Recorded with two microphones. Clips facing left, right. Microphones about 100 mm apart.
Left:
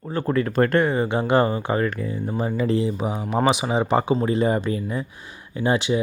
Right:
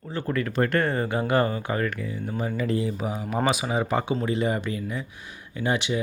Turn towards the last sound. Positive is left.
turn(degrees=30)  # may be behind; listen again after turning